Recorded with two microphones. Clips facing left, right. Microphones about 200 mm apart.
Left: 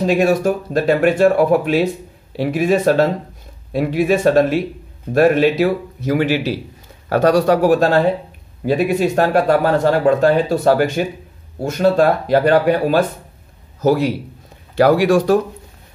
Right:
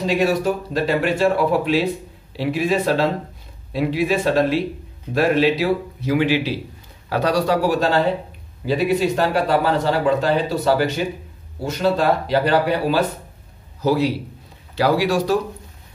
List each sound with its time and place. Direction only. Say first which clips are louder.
0.0 s a man's voice: left 4 dB; 50° left (ahead or behind)